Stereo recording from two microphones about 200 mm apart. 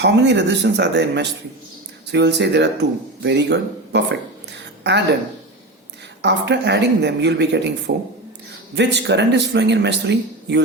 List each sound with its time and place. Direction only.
0.0 s speech: 60° right (ahead or behind)
6.2 s speech: 60° right (ahead or behind)